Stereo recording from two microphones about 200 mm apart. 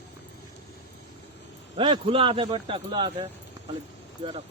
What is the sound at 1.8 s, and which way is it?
A man's voice, 25° right (ahead or behind).